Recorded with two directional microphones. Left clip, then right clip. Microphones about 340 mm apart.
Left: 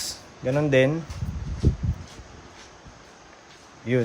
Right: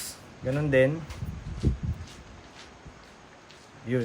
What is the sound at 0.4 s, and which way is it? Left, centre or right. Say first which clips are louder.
Speech: left 3 dB; left.